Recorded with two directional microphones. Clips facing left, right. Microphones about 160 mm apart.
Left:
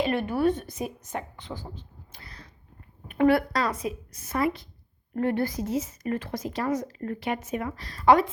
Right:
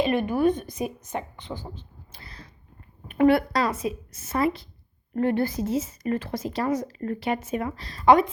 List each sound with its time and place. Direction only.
0.0 s speech: 15° right (ahead or behind)